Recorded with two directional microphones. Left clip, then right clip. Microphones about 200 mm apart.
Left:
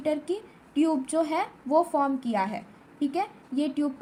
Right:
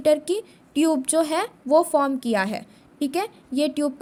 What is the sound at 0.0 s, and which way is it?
A woman's voice, 70° right (ahead or behind).